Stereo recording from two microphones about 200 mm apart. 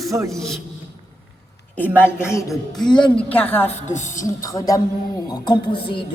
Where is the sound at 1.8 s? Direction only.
5° right (ahead or behind); by 3.7 s 10° left (ahead or behind).